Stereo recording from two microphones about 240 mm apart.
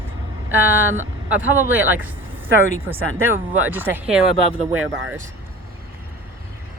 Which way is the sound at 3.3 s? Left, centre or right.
Centre.